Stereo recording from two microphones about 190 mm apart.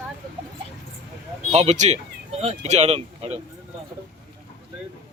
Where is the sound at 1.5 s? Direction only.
35° right (ahead or behind).